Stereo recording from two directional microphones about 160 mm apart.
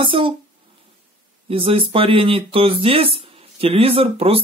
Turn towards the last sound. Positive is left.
turn(degrees=-35)  # may be behind; listen again after turning